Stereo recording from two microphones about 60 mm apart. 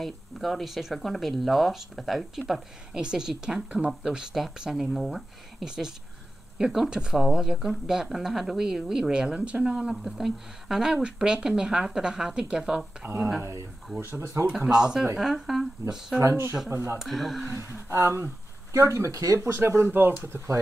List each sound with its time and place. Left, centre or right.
0.0 s speech: centre; by 9.8 s right
9.8 s speech: centre
13.0 s speech: right
14.7 s speech: centre
16.2 s speech: right
17.0 s speech: centre
17.8 s speech: right